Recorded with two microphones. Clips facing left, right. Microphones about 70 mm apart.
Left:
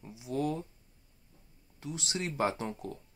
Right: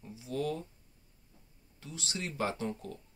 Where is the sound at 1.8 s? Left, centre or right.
Left.